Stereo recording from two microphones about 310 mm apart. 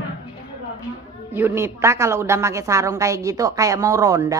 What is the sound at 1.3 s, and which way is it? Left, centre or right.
A woman's voice, centre.